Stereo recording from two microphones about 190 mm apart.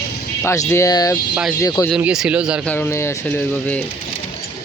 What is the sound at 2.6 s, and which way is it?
Speech, 10° left (ahead or behind).